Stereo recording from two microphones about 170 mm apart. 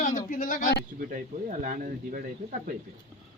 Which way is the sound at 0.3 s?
50° left (ahead or behind).